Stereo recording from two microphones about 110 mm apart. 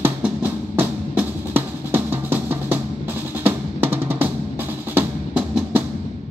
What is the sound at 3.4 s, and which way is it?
Drum, 20° right (ahead or behind).